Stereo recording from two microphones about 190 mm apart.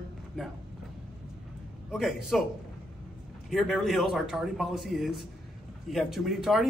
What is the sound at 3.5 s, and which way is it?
A man's voice, centre (ahead or behind).